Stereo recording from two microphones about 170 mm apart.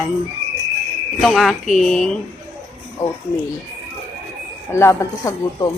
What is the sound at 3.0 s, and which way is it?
Speech, 20° left (ahead or behind).